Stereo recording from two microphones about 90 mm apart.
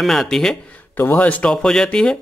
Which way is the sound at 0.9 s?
25° left (ahead or behind).